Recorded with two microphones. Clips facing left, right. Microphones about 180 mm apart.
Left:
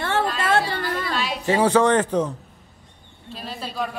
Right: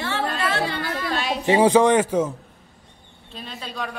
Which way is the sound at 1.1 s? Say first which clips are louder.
Right 1 dB; 50° right (ahead or behind).